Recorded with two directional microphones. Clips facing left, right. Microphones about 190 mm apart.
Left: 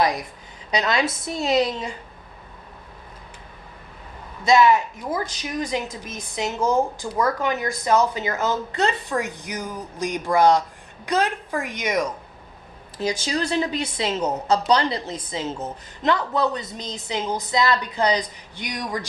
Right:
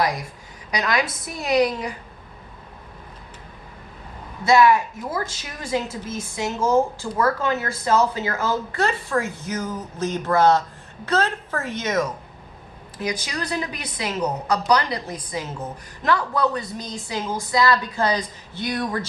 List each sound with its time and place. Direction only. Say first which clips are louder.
0.0 s a woman's voice: left 2 dB; 20° left (ahead or behind)
4.4 s a woman's voice: even; 20° left (ahead or behind)
13.0 s a woman's voice: left 3 dB; 25° left (ahead or behind)